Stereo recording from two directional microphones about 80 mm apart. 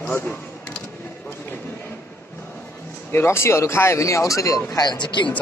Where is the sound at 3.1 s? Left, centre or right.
Left.